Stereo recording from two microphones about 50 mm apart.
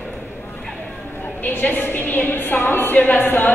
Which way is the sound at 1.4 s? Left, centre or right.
Left.